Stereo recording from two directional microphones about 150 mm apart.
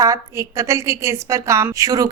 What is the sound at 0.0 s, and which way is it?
A woman's voice, 20° right (ahead or behind).